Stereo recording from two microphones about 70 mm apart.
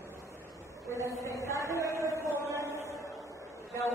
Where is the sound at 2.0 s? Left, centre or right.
Right.